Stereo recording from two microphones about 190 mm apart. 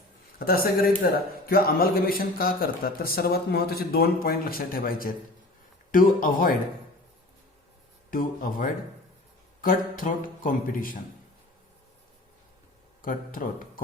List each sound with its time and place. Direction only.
0.3 s a man's voice: 50° left (ahead or behind)
8.1 s a man's voice: 45° left (ahead or behind)
13.0 s speech: 45° left (ahead or behind)